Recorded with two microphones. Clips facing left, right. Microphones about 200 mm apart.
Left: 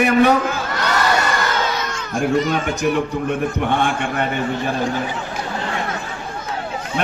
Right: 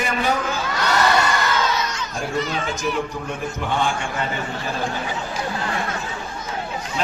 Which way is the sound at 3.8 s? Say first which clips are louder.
Left 3 dB; 60° left (ahead or behind).